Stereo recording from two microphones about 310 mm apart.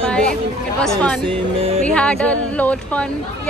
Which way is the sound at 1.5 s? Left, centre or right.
Centre.